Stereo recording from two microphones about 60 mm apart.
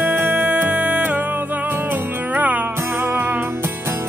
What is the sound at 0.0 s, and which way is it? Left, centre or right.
Music, right.